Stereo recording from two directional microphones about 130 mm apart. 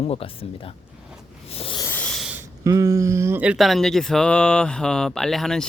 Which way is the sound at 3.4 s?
5° right (ahead or behind).